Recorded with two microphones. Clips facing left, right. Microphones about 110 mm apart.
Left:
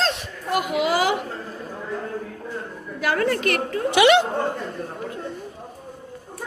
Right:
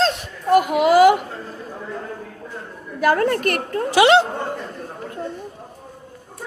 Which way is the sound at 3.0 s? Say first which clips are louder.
Right 4 dB; 45° right (ahead or behind).